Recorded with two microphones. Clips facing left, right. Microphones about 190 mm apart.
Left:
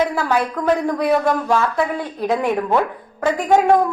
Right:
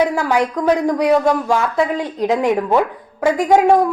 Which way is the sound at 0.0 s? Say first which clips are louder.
Right 3 dB; 15° right (ahead or behind).